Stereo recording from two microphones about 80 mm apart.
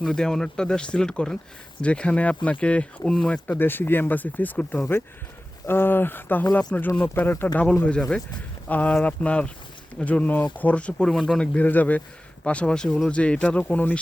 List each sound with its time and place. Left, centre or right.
0.0 s speech: centre
3.6 s speech: left
10.9 s speech: centre
11.5 s speech: left